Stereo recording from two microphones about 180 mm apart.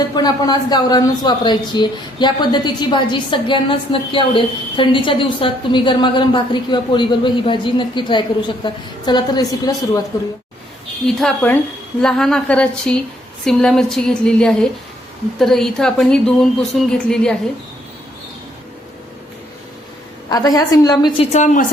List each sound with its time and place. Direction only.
0.2 s speech: 20° left (ahead or behind)
11.0 s a woman's voice: 5° left (ahead or behind)
20.3 s speech: 20° left (ahead or behind)
21.3 s a woman's voice: 45° left (ahead or behind)